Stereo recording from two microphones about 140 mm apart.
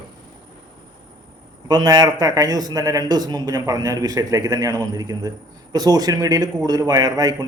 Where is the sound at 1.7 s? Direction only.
30° right (ahead or behind).